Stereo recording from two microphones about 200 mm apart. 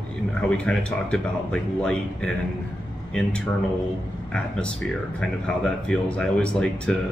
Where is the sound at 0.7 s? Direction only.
5° left (ahead or behind).